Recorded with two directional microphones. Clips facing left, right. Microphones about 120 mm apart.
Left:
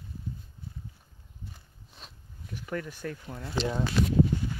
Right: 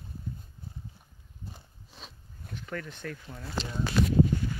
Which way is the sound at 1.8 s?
Centre (ahead or behind).